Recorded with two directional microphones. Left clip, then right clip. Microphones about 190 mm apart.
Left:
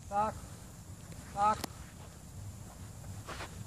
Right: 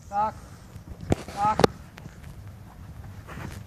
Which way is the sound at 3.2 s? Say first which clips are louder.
Right 3 dB; 10° left (ahead or behind).